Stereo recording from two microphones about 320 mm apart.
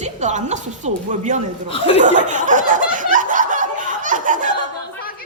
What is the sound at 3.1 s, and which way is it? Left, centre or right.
Snicker, right.